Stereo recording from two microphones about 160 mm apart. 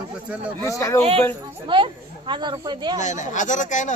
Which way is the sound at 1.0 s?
40° right (ahead or behind).